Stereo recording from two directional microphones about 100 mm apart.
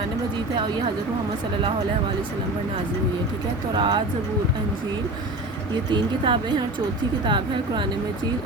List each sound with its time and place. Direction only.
3.8 s speech: 50° right (ahead or behind)
5.9 s speech: 55° right (ahead or behind)